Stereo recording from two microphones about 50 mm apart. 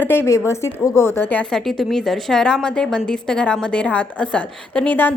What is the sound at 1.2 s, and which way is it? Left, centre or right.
Speech, left.